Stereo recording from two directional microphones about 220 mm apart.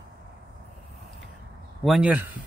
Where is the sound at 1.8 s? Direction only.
5° right (ahead or behind).